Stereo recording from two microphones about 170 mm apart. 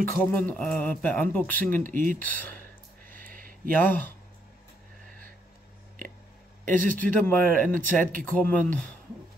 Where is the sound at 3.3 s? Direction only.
55° right (ahead or behind).